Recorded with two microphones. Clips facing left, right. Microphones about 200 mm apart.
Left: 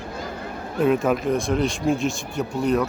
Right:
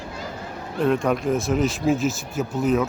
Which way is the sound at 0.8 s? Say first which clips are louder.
Left 1 dB; 5° left (ahead or behind).